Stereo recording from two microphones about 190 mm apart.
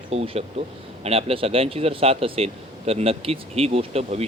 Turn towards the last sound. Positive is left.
turn(degrees=-35)  # may be behind; listen again after turning